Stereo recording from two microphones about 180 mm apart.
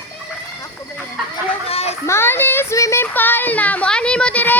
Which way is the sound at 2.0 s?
15° left (ahead or behind).